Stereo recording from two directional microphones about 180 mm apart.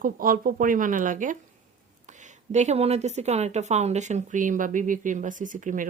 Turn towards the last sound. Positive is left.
turn(degrees=-45)  # may be behind; listen again after turning